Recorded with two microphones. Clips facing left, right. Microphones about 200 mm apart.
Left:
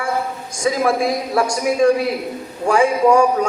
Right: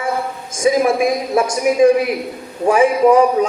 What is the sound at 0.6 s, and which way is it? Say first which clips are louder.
A man's voice: right 3 dB; 15° right (ahead or behind).